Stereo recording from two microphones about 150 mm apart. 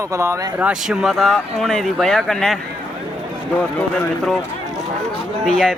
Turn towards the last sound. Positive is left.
turn(degrees=5)  # may be behind; listen again after turning